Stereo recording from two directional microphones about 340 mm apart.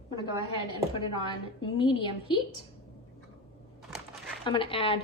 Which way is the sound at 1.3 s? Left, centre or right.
Centre.